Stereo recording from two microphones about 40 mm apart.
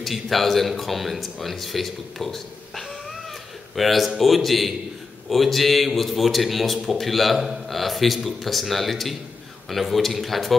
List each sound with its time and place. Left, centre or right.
0.0 s speech: centre